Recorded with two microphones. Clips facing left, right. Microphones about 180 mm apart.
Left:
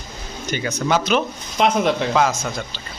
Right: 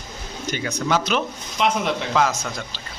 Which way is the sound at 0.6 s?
5° left (ahead or behind).